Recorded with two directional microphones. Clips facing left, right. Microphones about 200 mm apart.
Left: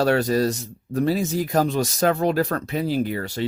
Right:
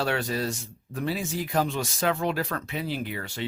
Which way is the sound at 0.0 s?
40° left (ahead or behind).